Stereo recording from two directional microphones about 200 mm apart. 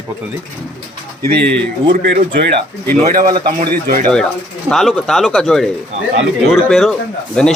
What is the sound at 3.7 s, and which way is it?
Speech, 50° right (ahead or behind).